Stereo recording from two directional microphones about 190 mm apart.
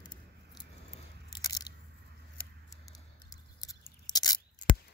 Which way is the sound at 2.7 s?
20° left (ahead or behind).